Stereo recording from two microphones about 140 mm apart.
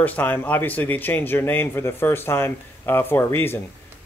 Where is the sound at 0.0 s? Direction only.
15° left (ahead or behind).